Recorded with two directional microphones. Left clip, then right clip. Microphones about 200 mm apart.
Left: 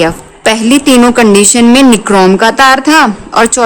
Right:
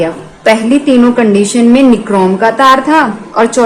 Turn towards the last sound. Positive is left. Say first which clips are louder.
# left 1 dB
turn(degrees=50)  # may be behind; listen again after turning